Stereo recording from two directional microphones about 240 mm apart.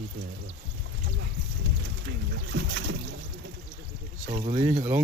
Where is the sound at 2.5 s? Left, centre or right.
Right.